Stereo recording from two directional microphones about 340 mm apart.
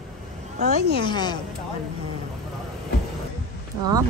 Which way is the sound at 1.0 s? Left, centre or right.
Centre.